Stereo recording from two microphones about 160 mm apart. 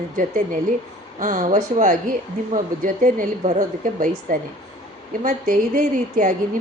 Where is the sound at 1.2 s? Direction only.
55° right (ahead or behind).